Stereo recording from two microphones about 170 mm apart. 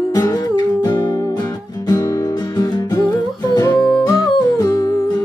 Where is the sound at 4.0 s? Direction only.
25° left (ahead or behind).